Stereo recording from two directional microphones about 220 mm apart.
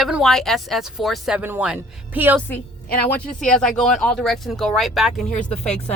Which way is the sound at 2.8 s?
45° left (ahead or behind).